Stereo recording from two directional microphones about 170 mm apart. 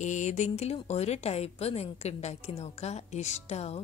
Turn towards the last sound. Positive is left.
turn(degrees=40)  # may be behind; listen again after turning